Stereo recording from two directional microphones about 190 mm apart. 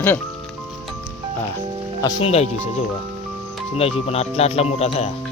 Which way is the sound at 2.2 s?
35° left (ahead or behind).